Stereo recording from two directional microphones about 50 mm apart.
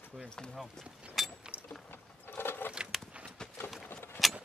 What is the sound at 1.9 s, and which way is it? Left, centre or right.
Vehicle, left.